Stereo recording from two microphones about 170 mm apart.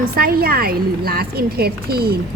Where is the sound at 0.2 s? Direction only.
60° right (ahead or behind).